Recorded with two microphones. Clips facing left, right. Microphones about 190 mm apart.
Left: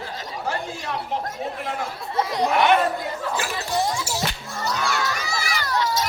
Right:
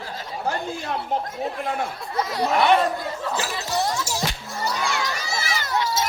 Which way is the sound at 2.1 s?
20° left (ahead or behind).